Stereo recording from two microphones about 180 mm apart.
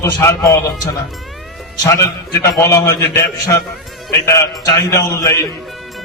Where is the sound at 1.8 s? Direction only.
15° left (ahead or behind).